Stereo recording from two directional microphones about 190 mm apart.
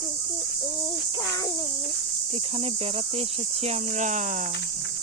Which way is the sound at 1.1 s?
20° left (ahead or behind).